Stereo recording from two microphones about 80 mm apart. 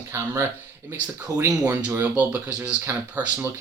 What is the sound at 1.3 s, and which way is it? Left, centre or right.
Speech, right.